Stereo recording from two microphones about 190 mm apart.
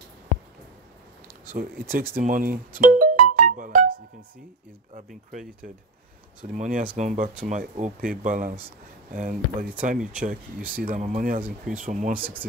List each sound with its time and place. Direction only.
1.5 s speech: 50° right (ahead or behind)
2.7 s music: 45° right (ahead or behind)
6.5 s speech: 45° right (ahead or behind)